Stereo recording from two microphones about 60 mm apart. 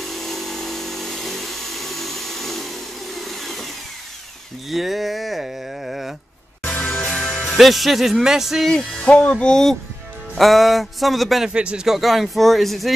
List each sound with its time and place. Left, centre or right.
0.0 s a sound: centre
4.6 s a sound: centre
7.1 s music: centre
8.7 s music: centre
11.5 s speech: centre
11.9 s music: centre